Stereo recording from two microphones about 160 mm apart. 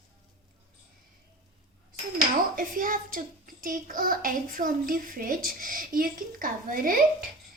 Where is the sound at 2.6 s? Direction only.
60° right (ahead or behind).